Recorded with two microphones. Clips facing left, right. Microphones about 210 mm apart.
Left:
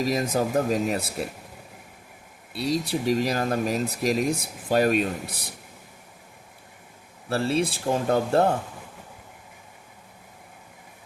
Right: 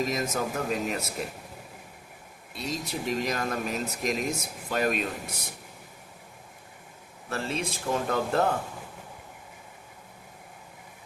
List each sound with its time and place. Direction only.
0.0 s speech: 35° left (ahead or behind)
2.5 s speech: 35° left (ahead or behind)
7.3 s speech: 35° left (ahead or behind)